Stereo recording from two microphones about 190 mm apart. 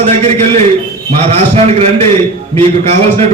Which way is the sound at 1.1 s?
35° right (ahead or behind).